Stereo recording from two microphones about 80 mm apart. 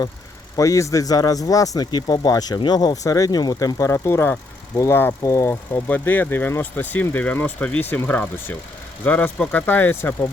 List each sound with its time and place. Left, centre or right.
0.5 s speech: left
2.6 s speech: left